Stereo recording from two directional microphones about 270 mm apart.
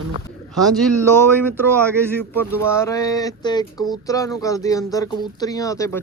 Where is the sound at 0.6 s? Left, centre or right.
Centre.